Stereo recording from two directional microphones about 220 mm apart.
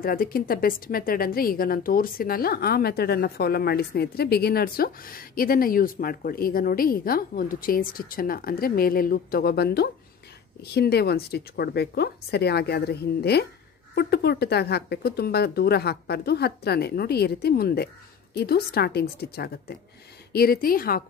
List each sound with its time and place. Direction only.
0.0 s a woman's voice: 40° left (ahead or behind)